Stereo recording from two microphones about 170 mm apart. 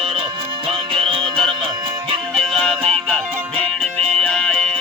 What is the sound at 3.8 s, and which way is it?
Music, 5° left (ahead or behind).